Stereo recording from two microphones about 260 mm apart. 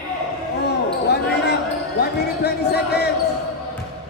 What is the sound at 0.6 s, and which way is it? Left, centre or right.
Basketball bounce, left.